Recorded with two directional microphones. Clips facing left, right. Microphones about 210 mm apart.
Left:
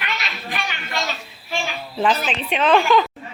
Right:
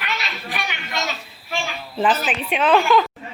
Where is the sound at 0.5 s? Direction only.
15° right (ahead or behind).